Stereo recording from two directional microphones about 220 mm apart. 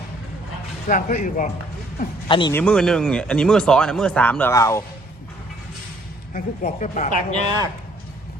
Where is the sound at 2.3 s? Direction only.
20° left (ahead or behind).